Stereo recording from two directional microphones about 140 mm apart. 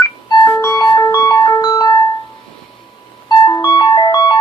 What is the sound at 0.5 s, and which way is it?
Music, 20° left (ahead or behind).